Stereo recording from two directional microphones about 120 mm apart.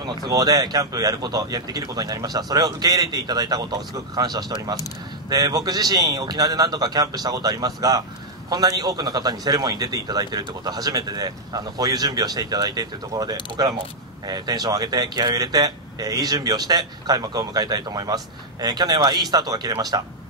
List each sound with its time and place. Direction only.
0.3 s a man's voice: 35° right (ahead or behind)